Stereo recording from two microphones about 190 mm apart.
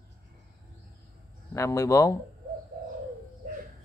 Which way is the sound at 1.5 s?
15° left (ahead or behind).